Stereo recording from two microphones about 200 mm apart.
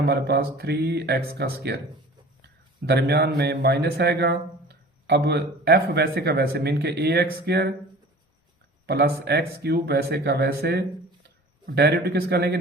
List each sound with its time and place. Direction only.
0.0 s a man's voice: 55° right (ahead or behind)
8.9 s speech: 50° right (ahead or behind)